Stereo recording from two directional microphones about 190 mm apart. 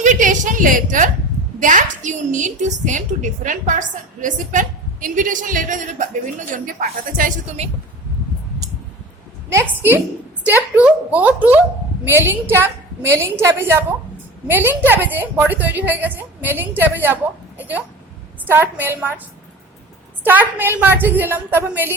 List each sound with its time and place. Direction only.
0.0 s a woman's voice: 40° right (ahead or behind)
9.5 s a woman's voice: 15° right (ahead or behind)
20.2 s a woman's voice: 10° right (ahead or behind)